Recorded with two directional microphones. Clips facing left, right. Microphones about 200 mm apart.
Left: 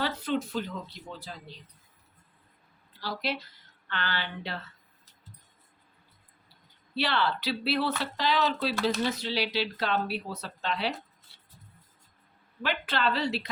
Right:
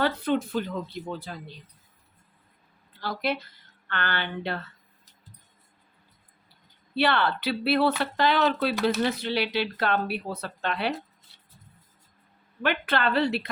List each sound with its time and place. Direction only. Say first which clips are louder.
0.0 s speech: right 5 dB; 55° right (ahead or behind)
3.0 s speech: right 4 dB; 55° right (ahead or behind)
6.9 s speech: right 4 dB; 55° right (ahead or behind)
12.6 s speech: right 4 dB; 55° right (ahead or behind)